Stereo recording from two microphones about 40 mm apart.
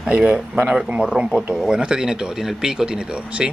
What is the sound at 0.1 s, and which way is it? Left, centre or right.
Speech, right.